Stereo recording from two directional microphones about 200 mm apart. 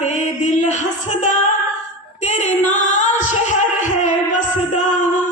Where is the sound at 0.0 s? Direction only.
35° left (ahead or behind).